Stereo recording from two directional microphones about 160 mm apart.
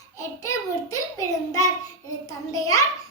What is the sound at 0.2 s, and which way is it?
Child singing, 20° left (ahead or behind).